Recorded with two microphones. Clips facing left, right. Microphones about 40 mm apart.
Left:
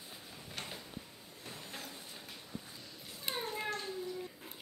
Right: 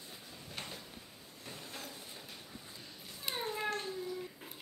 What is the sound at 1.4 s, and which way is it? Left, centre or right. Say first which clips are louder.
Vehicle: even; centre.